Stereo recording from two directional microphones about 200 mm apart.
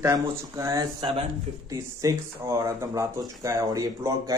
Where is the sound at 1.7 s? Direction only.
15° right (ahead or behind).